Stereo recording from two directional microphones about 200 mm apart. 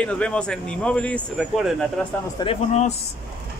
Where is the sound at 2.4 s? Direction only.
30° left (ahead or behind).